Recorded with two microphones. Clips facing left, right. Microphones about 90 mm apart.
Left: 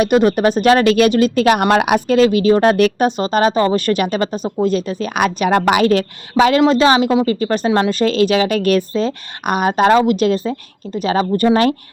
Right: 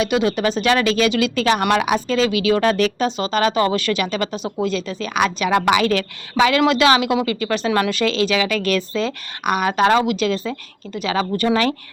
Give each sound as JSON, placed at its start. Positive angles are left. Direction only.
{"t": 0.0, "sound": "speech", "side_deg": 50}
{"t": 3.8, "sound": "speech", "side_deg": 50}